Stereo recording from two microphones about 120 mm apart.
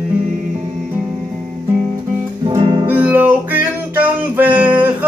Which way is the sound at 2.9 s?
15° right (ahead or behind).